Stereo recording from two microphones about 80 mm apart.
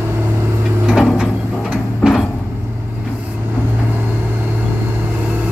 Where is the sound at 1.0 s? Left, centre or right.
Centre.